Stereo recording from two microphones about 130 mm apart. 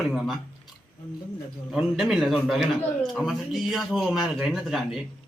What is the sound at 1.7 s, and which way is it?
A man's voice, 5° right (ahead or behind).